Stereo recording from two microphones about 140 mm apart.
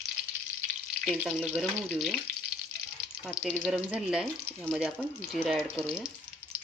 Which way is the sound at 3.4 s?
10° right (ahead or behind).